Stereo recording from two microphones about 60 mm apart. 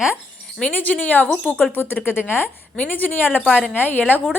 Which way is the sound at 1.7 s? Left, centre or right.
Left.